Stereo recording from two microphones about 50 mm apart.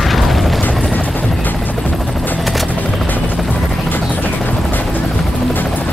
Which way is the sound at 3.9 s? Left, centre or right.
Left.